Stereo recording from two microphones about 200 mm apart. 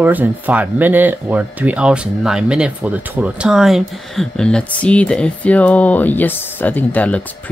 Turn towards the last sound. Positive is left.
turn(degrees=10)  # may be behind; listen again after turning